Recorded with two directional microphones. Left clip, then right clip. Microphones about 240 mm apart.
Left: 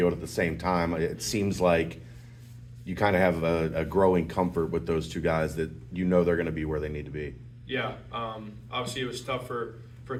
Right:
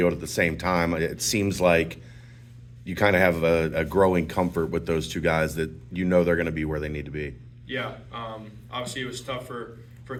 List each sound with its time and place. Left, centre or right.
0.0 s speech: right
7.7 s speech: centre